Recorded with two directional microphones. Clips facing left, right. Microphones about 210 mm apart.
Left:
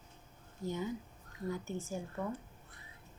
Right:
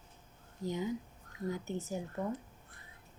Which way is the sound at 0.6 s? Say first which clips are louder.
Right 2 dB; 15° right (ahead or behind).